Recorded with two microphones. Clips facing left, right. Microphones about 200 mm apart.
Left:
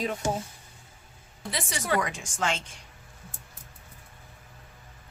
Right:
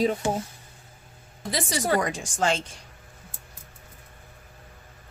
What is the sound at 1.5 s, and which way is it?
A woman's voice, 35° right (ahead or behind).